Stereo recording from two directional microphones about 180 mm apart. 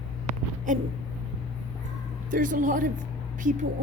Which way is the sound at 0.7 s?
45° right (ahead or behind).